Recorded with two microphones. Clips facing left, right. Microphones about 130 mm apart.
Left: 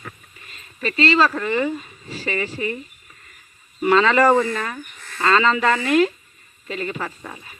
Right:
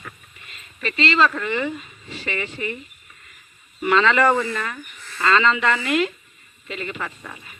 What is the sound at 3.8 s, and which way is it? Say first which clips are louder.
Speech: left 2 dB; 35° left (ahead or behind).